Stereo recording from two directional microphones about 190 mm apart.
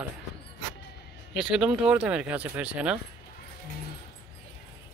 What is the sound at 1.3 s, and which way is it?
Speech, 5° right (ahead or behind).